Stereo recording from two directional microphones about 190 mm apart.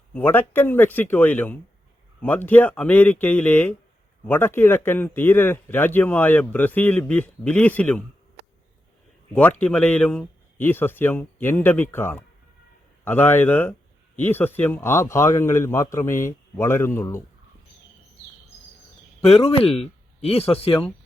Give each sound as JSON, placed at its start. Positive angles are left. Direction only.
{"t": 0.1, "sound": "a man's voice", "side_deg": 10}
{"t": 9.3, "sound": "a man's voice", "side_deg": 5}
{"t": 19.2, "sound": "speech", "side_deg": 30}